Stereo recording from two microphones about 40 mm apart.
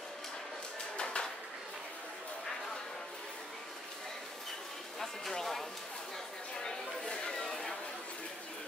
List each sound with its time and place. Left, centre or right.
0.9 s bird: left
5.0 s speech: centre
6.6 s chatter: centre